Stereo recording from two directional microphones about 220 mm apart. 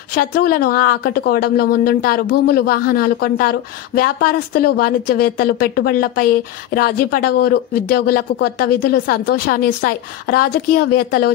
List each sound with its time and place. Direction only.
0.1 s speech: 40° left (ahead or behind)